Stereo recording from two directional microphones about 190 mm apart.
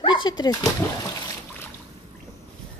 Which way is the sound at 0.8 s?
10° left (ahead or behind).